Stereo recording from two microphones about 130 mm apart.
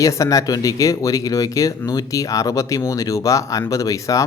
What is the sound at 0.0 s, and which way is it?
Speech, 25° left (ahead or behind).